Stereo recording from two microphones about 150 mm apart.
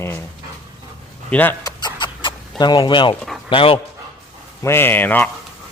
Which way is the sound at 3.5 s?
35° left (ahead or behind).